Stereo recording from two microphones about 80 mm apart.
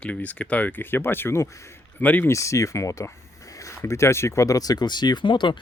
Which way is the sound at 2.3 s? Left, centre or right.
Left.